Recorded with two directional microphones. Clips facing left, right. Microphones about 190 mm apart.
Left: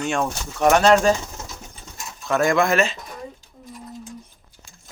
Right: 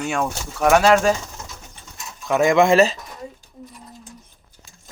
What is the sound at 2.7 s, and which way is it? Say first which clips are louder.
Speech: right 5 dB; 35° right (ahead or behind).